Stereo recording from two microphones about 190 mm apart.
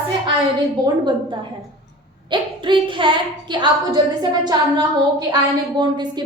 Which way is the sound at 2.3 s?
25° right (ahead or behind).